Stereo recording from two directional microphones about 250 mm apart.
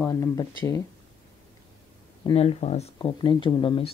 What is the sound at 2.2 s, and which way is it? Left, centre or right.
Speech, left.